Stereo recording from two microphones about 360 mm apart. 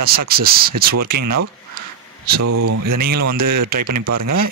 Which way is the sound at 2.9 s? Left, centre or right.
Right.